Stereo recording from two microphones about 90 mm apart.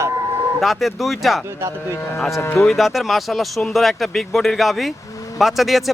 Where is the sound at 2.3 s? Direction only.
30° left (ahead or behind).